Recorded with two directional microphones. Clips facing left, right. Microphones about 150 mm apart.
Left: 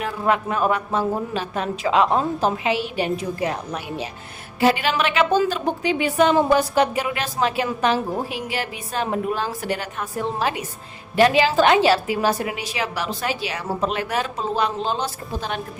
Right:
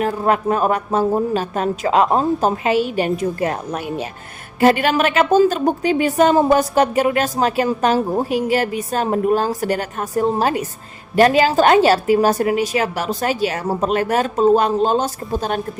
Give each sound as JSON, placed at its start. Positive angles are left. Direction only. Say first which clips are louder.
{"t": 0.0, "sound": "a woman's voice", "louder": "right 4 dB", "side_deg": -40}